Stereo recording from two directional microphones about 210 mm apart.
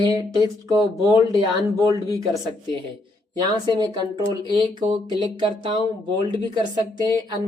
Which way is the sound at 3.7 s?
20° right (ahead or behind).